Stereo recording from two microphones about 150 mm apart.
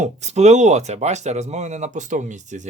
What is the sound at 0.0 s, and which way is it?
Speech, 50° right (ahead or behind).